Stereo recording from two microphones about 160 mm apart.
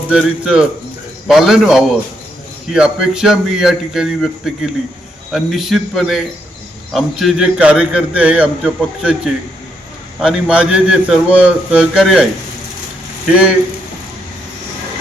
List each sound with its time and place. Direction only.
0.1 s a man's voice: 5° right (ahead or behind)
13.2 s a man's voice: 5° right (ahead or behind)